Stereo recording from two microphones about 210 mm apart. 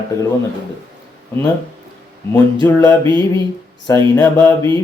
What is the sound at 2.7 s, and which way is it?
Speech, 10° left (ahead or behind).